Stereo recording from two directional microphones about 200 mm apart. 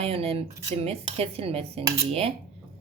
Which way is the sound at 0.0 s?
30° right (ahead or behind).